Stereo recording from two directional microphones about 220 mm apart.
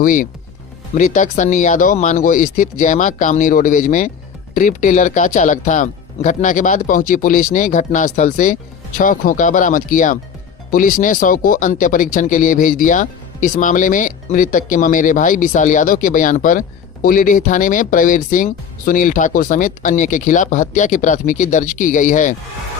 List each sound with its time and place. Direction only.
0.0 s speech: 40° left (ahead or behind)